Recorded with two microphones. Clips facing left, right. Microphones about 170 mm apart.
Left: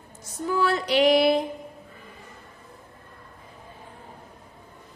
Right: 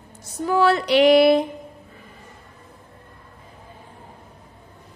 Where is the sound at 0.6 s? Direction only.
70° right (ahead or behind).